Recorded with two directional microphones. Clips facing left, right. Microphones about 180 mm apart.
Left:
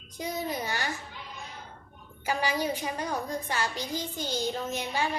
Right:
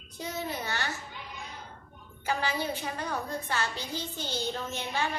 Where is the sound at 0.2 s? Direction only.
15° left (ahead or behind).